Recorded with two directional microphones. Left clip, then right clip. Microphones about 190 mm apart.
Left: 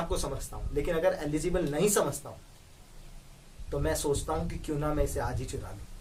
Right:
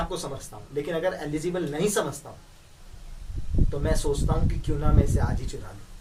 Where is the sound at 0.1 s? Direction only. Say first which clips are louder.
Right 1 dB; 10° left (ahead or behind).